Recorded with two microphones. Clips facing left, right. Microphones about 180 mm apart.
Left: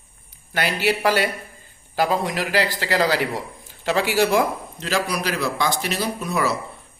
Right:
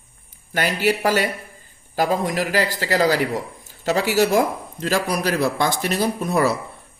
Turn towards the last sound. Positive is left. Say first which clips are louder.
# right 4 dB
turn(degrees=-55)  # may be behind; listen again after turning